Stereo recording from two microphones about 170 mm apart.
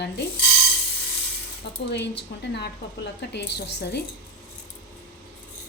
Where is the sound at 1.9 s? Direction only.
85° left.